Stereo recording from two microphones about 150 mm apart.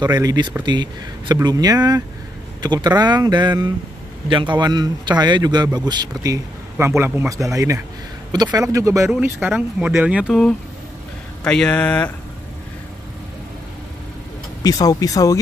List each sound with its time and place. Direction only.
0.0 s speech: 25° right (ahead or behind)
9.1 s speech: 5° right (ahead or behind)
11.4 s speech: 5° left (ahead or behind)
14.6 s speech: 25° left (ahead or behind)